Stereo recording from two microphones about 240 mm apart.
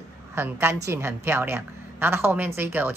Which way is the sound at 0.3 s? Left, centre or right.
Centre.